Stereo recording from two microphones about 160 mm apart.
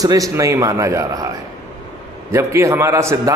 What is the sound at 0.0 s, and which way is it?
A man's voice, 20° right (ahead or behind).